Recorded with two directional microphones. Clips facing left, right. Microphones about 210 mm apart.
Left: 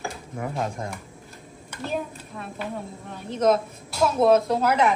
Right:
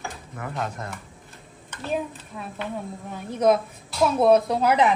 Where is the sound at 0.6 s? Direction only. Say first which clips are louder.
Left 1 dB; 10° left (ahead or behind).